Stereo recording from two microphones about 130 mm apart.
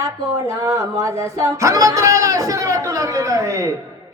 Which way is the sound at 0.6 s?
25° right (ahead or behind).